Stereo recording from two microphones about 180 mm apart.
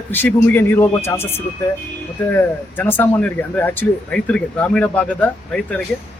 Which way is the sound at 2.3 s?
10° left (ahead or behind).